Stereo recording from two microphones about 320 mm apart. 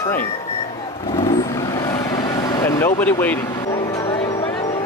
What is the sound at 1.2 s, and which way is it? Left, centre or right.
Vehicle, centre.